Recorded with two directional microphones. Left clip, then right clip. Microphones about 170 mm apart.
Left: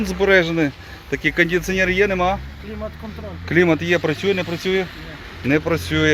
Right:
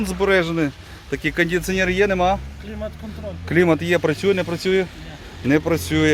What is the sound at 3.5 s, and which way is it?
Speech, 10° right (ahead or behind).